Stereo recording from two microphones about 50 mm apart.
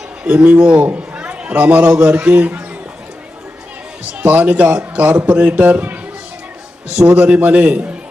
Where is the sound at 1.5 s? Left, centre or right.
Right.